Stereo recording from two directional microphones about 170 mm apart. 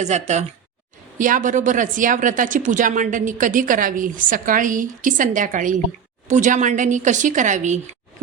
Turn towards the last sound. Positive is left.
turn(degrees=-45)  # may be behind; listen again after turning